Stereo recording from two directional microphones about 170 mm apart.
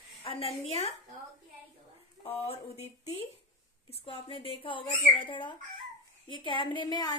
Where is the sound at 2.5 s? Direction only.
40° left (ahead or behind).